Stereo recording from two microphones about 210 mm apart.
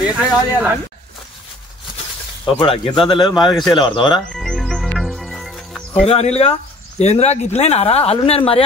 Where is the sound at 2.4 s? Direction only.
25° left (ahead or behind).